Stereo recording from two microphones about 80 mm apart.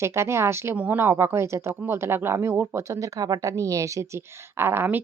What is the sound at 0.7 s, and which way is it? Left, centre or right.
Speech, centre.